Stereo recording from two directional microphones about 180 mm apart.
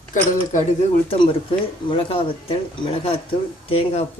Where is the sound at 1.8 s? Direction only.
30° left (ahead or behind).